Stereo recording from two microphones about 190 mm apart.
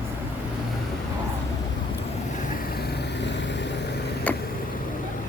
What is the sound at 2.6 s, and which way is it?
Vehicle, 55° left (ahead or behind).